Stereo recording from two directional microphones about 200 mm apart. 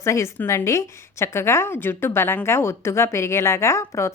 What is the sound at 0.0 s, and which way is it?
A woman's voice, 15° left (ahead or behind).